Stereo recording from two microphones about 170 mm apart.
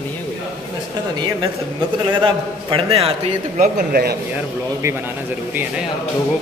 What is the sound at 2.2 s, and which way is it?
Speech, 35° right (ahead or behind).